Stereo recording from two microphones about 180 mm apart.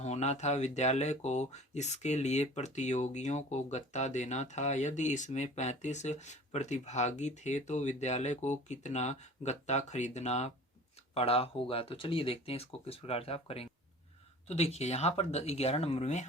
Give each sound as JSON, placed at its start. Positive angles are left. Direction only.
{"t": 0.0, "sound": "speech", "side_deg": 40}